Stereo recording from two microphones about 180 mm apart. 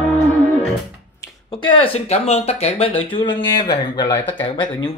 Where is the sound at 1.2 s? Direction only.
20° left (ahead or behind).